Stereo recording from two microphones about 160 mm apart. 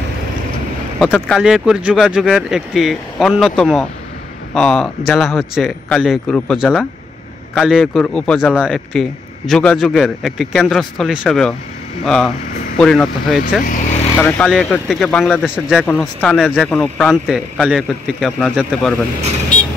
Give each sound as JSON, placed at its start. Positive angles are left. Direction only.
{"t": 1.3, "sound": "speech", "side_deg": -5}
{"t": 12.7, "sound": "speech", "side_deg": 5}
{"t": 13.7, "sound": "vehicle", "side_deg": 50}
{"t": 14.1, "sound": "speech", "side_deg": 10}
{"t": 15.4, "sound": "speech", "side_deg": -5}